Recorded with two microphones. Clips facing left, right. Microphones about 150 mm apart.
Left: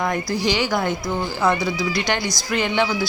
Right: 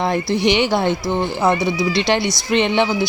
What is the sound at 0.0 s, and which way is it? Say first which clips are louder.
Speech: right 4 dB; 30° right (ahead or behind).